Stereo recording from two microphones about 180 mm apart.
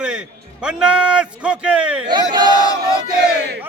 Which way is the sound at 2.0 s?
25° right (ahead or behind).